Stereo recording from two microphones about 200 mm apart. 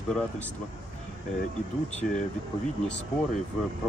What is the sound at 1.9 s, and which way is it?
Speech, 35° left (ahead or behind).